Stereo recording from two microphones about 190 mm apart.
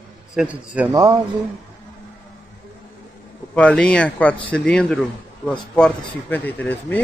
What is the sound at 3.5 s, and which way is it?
Speech, 5° left (ahead or behind).